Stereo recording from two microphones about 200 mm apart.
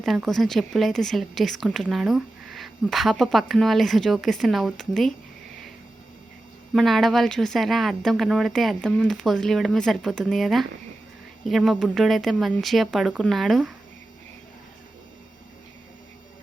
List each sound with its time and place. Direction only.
0.0 s speech: centre (ahead or behind)
6.7 s speech: centre (ahead or behind)